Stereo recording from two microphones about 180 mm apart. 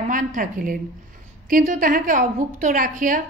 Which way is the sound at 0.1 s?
45° right (ahead or behind).